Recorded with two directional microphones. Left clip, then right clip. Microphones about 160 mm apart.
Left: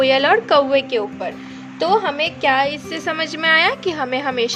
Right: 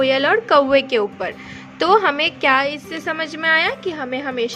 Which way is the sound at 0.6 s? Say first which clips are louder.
Right 1 dB; 40° right (ahead or behind).